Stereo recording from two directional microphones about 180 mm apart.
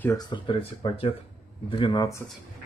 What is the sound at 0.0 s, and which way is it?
Speech, 20° left (ahead or behind).